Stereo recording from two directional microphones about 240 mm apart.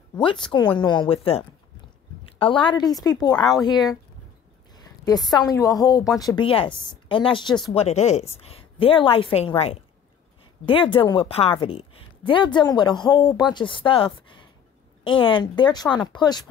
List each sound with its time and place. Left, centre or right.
0.7 s speech: centre
4.7 s a sound: centre
5.3 s speech: centre